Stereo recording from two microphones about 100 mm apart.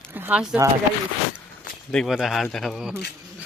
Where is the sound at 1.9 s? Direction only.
Centre (ahead or behind).